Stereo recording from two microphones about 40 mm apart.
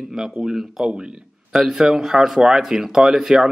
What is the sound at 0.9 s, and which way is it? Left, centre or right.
Speech, right.